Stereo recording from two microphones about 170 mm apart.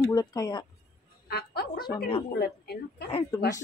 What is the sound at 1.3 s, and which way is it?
Speech, 65° left (ahead or behind).